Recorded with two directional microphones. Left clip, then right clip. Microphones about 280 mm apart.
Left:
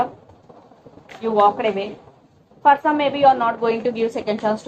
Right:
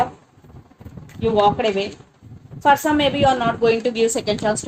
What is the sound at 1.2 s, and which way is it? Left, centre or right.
A woman's voice, right.